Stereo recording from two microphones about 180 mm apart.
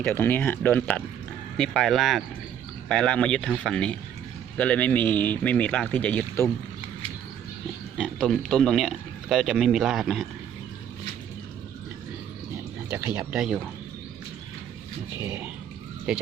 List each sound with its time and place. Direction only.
0.0 s speech: 10° left (ahead or behind)
7.9 s speech: centre (ahead or behind)
12.9 s speech: 10° right (ahead or behind)